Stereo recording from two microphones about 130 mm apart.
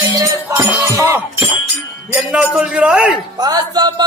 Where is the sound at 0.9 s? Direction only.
25° right (ahead or behind).